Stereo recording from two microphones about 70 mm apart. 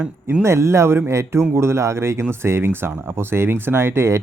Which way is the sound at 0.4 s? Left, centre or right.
Right.